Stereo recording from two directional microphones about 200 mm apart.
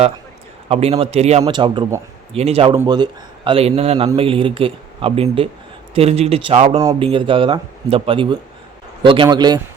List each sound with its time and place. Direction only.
0.7 s a man's voice: 30° right (ahead or behind)